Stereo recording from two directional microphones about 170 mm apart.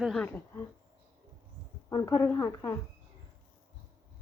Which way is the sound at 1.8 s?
20° left (ahead or behind).